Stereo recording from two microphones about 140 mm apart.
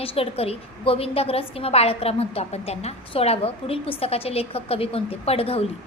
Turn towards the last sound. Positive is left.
turn(degrees=45)  # may be behind; listen again after turning